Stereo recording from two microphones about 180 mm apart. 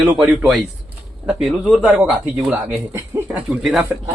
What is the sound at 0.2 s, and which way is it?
Speech, 5° right (ahead or behind).